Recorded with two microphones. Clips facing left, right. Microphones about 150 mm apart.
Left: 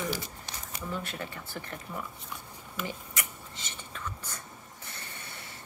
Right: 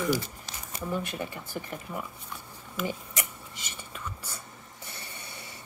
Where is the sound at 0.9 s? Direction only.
15° right (ahead or behind).